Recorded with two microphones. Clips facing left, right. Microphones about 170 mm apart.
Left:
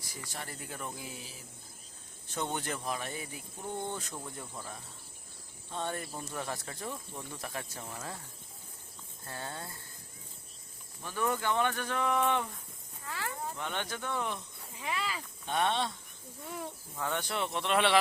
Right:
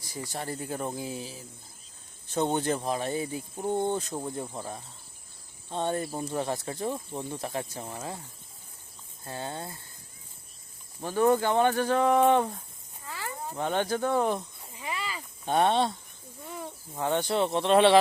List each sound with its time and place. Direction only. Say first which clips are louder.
0.0 s speech: right 8 dB; 30° right (ahead or behind)
2.3 s speech: right 9 dB; 30° right (ahead or behind)
9.2 s speech: right 6 dB; 20° right (ahead or behind)
11.0 s speech: right 9 dB; 35° right (ahead or behind)
13.1 s snake: right 1 dB; 5° right (ahead or behind)
13.6 s speech: right 15 dB; 35° right (ahead or behind)
14.8 s a sound: right 1 dB; centre (ahead or behind)
15.4 s speech: right 7 dB; 35° right (ahead or behind)
16.5 s speech: right 1 dB; centre (ahead or behind)
16.9 s speech: right 8 dB; 30° right (ahead or behind)